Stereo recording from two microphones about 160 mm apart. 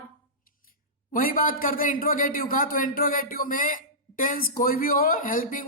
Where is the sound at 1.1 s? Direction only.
60° left (ahead or behind).